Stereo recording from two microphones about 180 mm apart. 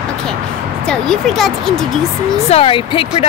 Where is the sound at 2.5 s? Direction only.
30° left (ahead or behind).